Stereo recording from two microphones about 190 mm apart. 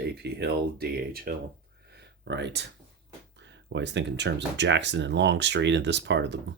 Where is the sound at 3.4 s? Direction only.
70° right (ahead or behind).